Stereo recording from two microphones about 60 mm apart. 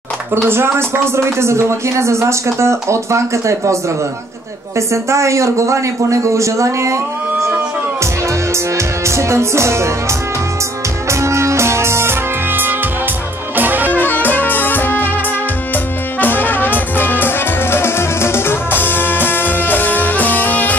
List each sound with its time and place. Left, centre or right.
0.5 s speech: right
4.7 s speech: right
8.7 s music: right
11.1 s music: right
13.9 s music: left